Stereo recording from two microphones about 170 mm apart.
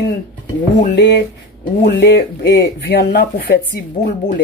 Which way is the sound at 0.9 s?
90° left.